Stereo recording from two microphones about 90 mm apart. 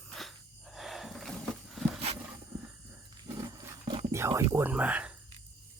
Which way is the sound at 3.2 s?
45° right (ahead or behind).